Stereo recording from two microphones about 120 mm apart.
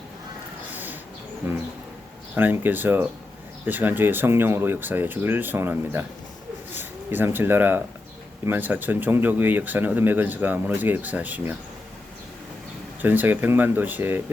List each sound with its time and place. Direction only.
0.7 s a sound: 15° right (ahead or behind)
2.3 s speech: 15° right (ahead or behind)
13.0 s speech: 15° right (ahead or behind)